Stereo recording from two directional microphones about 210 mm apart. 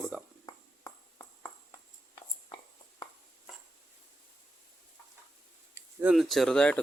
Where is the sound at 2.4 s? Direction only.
20° left (ahead or behind).